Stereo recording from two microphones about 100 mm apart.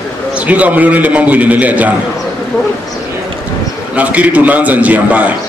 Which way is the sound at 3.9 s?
15° right (ahead or behind).